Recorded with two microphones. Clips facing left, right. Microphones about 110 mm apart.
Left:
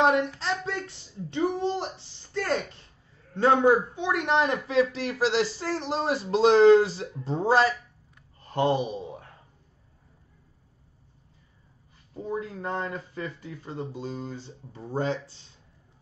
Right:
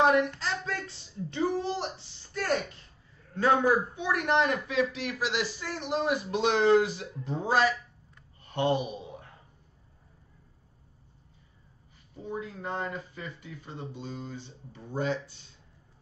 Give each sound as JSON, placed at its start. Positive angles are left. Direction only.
{"t": 0.0, "sound": "speech", "side_deg": 25}
{"t": 1.3, "sound": "a man's voice", "side_deg": 25}
{"t": 12.2, "sound": "speech", "side_deg": 40}